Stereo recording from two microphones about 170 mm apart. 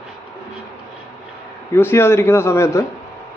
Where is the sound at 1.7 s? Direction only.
15° left (ahead or behind).